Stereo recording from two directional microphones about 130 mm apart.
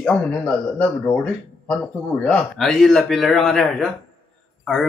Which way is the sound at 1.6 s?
5° left (ahead or behind).